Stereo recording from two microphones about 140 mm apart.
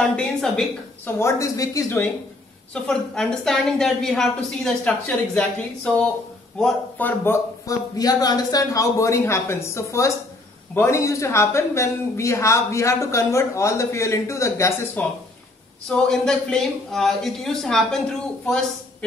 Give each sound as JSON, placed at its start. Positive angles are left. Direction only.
{"t": 0.1, "sound": "a sound", "side_deg": 5}
{"t": 1.2, "sound": "speech", "side_deg": 25}
{"t": 2.7, "sound": "speech", "side_deg": 5}
{"t": 7.6, "sound": "speech", "side_deg": 25}